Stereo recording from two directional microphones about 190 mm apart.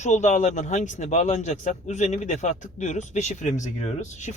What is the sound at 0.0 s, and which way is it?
A man's voice, 40° left (ahead or behind).